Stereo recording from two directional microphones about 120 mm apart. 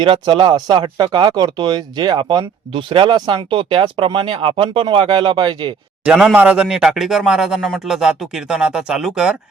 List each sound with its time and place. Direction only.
0.0 s speech: 45° right (ahead or behind)
6.1 s speech: 5° right (ahead or behind)